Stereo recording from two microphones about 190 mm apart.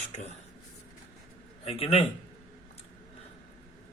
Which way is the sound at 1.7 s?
30° left (ahead or behind).